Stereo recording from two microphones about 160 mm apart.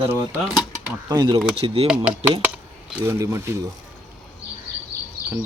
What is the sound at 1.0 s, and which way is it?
Speech, 25° right (ahead or behind).